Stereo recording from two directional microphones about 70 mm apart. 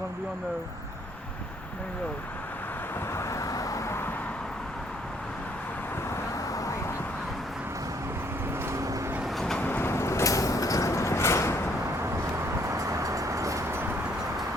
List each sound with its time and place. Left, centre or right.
3.2 s vehicle: left
6.1 s vehicle: left
8.6 s vehicle: right
9.2 s vehicle: centre
9.6 s vehicle: left
9.9 s vehicle: left
12.0 s vehicle: right